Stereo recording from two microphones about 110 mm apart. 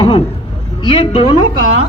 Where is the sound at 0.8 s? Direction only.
55° left (ahead or behind).